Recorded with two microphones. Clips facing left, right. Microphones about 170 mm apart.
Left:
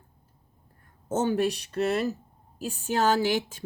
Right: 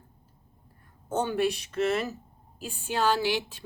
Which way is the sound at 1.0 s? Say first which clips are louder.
Left 2 dB; 45° left (ahead or behind).